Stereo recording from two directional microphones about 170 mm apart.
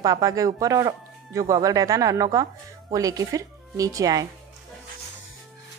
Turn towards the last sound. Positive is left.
turn(degrees=-20)  # may be behind; listen again after turning